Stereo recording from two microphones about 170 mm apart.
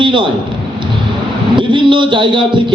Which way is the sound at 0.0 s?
30° right (ahead or behind).